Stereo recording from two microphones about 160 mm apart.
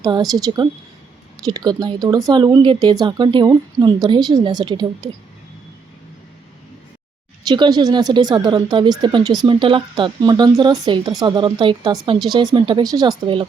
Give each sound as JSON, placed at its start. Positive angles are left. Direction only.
{"t": 0.0, "sound": "speech", "side_deg": -25}
{"t": 7.4, "sound": "speech", "side_deg": -25}